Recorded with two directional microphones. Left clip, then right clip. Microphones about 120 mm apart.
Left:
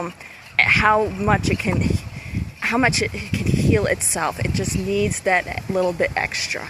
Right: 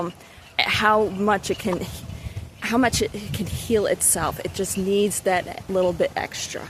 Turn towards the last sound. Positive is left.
turn(degrees=-25)  # may be behind; listen again after turning